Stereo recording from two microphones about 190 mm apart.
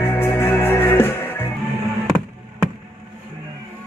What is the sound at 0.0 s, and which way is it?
Music, 15° left (ahead or behind).